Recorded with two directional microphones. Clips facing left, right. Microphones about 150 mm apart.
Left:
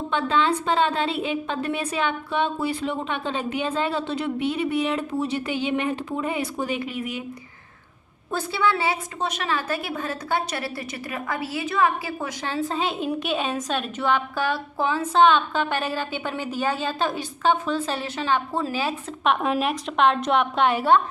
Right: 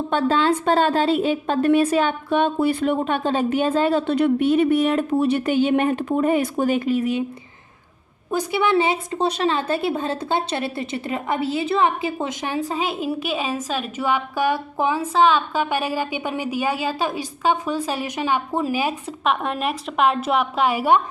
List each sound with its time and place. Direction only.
0.1 s a woman's voice: 40° right (ahead or behind)
8.3 s a woman's voice: 15° right (ahead or behind)
19.2 s a woman's voice: centre (ahead or behind)